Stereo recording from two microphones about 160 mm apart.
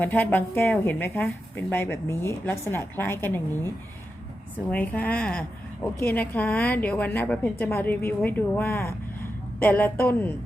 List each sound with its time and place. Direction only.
0.0 s a woman's voice: 10° left (ahead or behind)